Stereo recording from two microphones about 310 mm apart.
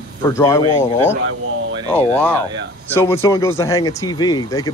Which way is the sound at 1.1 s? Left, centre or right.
Right.